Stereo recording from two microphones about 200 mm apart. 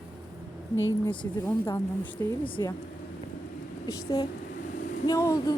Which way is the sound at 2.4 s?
25° left (ahead or behind).